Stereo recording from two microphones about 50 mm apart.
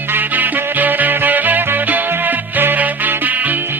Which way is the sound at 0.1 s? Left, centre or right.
Right.